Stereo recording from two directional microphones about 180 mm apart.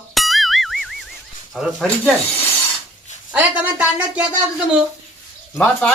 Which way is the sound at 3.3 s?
10° right (ahead or behind).